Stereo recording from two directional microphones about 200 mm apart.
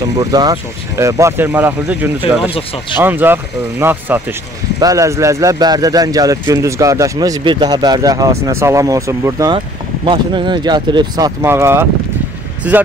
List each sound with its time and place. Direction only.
0.2 s speech: 20° right (ahead or behind)